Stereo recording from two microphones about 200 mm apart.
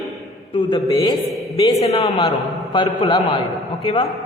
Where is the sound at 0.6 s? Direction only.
20° left (ahead or behind).